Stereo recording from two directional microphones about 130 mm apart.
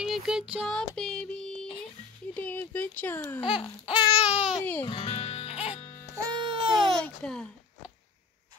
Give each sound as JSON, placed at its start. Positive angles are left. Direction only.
{"t": 0.0, "sound": "a sound", "side_deg": -5}
{"t": 0.7, "sound": "music", "side_deg": 5}
{"t": 2.3, "sound": "speech", "side_deg": 10}
{"t": 3.3, "sound": "babbling", "side_deg": 40}
{"t": 4.3, "sound": "a child's voice", "side_deg": -5}
{"t": 4.8, "sound": "music", "side_deg": 40}
{"t": 6.3, "sound": "baby cry", "side_deg": -40}
{"t": 7.0, "sound": "a child's voice", "side_deg": 5}